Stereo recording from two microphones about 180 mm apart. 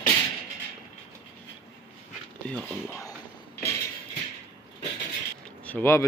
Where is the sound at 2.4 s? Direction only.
5° left (ahead or behind).